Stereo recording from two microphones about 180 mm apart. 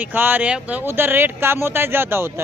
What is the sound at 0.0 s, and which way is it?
Speech, 10° right (ahead or behind).